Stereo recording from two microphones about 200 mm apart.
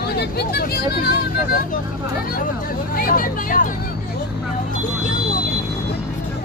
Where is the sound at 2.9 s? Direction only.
45° left (ahead or behind).